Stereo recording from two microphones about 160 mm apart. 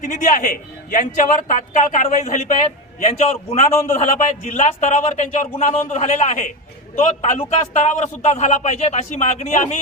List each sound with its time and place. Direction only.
0.0 s speech: 50° left (ahead or behind)